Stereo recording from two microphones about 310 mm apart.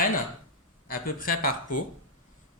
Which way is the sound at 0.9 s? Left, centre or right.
Left.